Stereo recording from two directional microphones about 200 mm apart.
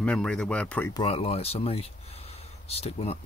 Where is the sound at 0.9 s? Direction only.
30° left (ahead or behind).